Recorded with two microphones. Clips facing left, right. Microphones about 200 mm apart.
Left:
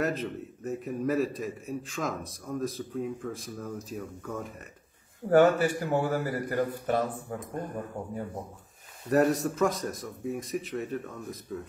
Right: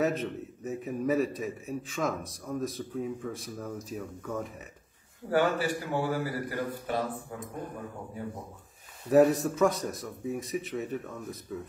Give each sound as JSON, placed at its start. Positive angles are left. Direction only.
{"t": 0.0, "sound": "a man's voice", "side_deg": 0}
{"t": 5.3, "sound": "speech", "side_deg": 50}
{"t": 7.3, "sound": "a man's voice", "side_deg": 0}
{"t": 9.1, "sound": "a man's voice", "side_deg": 0}